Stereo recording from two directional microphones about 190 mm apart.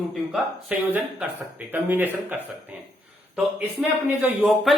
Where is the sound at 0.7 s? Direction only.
5° right (ahead or behind).